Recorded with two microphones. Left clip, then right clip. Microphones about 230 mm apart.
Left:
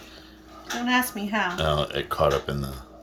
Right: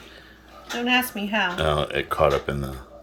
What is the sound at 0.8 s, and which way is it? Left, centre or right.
Speech, centre.